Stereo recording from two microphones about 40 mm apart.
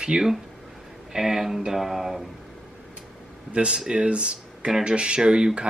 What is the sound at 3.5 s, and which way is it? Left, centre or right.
Speech, right.